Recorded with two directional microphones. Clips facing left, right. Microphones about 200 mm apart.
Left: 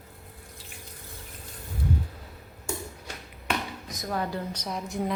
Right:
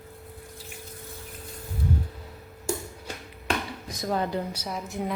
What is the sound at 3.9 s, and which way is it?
Speech, 25° right (ahead or behind).